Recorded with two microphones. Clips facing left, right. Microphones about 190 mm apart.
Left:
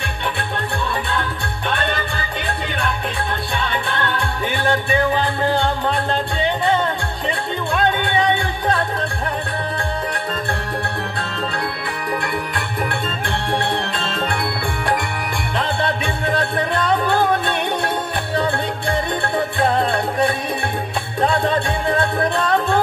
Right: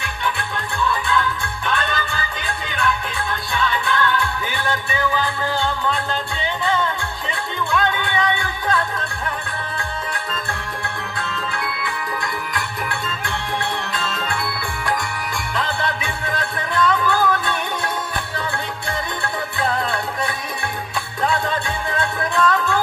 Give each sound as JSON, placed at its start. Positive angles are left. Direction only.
{"t": 3.5, "sound": "music", "side_deg": 25}
{"t": 5.5, "sound": "music", "side_deg": 60}
{"t": 6.6, "sound": "music", "side_deg": 30}
{"t": 15.5, "sound": "music", "side_deg": 30}